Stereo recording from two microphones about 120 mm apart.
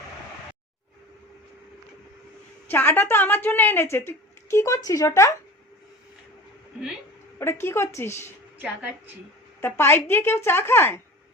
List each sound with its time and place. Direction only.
2.6 s a woman's voice: 15° left (ahead or behind)
7.3 s a woman's voice: 20° left (ahead or behind)
8.6 s a woman's voice: 10° right (ahead or behind)
9.6 s a woman's voice: 20° left (ahead or behind)